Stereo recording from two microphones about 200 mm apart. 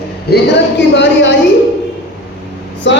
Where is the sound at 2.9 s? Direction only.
65° left (ahead or behind).